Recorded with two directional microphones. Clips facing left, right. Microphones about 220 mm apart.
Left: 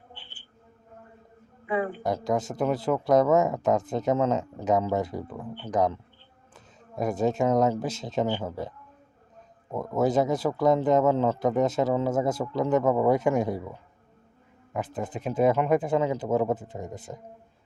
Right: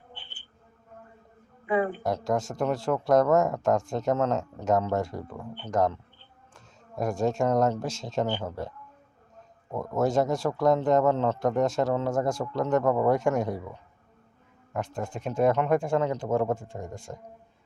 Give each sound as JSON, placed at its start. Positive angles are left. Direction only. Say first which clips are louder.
{"t": 1.7, "sound": "speech", "louder": "right 2 dB", "side_deg": -30}
{"t": 2.0, "sound": "speech", "louder": "left 1 dB", "side_deg": 0}
{"t": 9.7, "sound": "speech", "louder": "left 1 dB", "side_deg": 0}
{"t": 14.7, "sound": "speech", "louder": "left 1 dB", "side_deg": 5}